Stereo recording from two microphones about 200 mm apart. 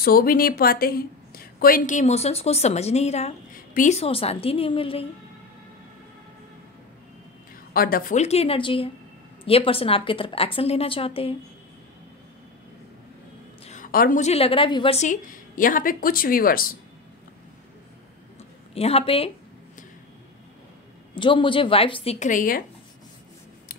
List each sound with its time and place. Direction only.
0.0 s a woman's voice: 50° left (ahead or behind); by 5.0 s 25° left (ahead or behind)
7.7 s a woman's voice: 45° left (ahead or behind); by 11.3 s 30° left (ahead or behind)
13.7 s a woman's voice: 40° left (ahead or behind)
18.8 s a woman's voice: 30° left (ahead or behind)
21.1 s a woman's voice: 25° left (ahead or behind); by 22.6 s 40° left (ahead or behind)